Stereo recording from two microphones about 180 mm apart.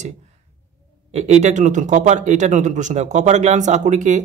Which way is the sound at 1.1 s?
40° right (ahead or behind).